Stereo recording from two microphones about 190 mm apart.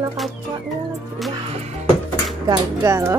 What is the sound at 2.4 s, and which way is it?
Speech, 15° right (ahead or behind).